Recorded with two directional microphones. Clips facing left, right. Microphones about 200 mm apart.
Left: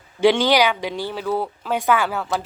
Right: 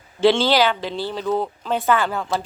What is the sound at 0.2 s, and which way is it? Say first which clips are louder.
Speech: even; 15° left (ahead or behind).